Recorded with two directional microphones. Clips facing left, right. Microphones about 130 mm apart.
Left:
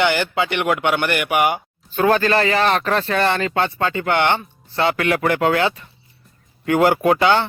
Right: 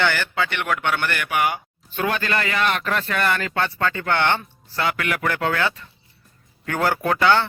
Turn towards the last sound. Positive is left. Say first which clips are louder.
# left 3 dB
turn(degrees=20)  # may be behind; listen again after turning